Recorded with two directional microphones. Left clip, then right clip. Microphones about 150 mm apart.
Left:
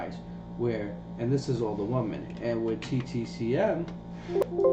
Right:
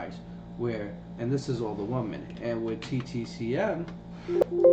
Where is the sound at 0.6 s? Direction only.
Centre (ahead or behind).